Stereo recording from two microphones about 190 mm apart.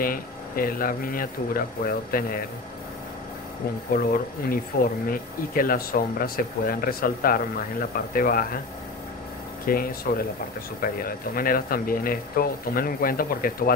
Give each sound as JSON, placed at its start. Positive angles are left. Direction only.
{"t": 0.0, "sound": "speech", "side_deg": 50}
{"t": 3.9, "sound": "speech", "side_deg": 50}
{"t": 9.7, "sound": "speech", "side_deg": 50}